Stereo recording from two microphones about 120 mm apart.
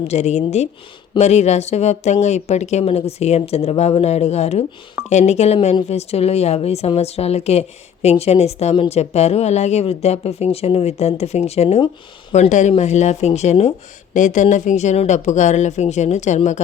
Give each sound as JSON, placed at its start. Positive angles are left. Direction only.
{"t": 0.1, "sound": "speech", "side_deg": 65}
{"t": 12.3, "sound": "speech", "side_deg": 80}